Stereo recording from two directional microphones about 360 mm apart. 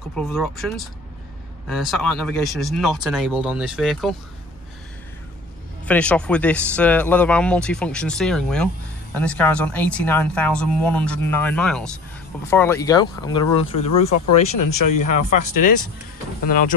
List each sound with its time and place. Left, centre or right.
0.1 s speech: centre
5.9 s speech: centre
13.7 s speech: left
16.4 s speech: left